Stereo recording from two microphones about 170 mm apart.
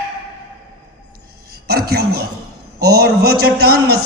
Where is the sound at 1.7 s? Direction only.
65° right (ahead or behind).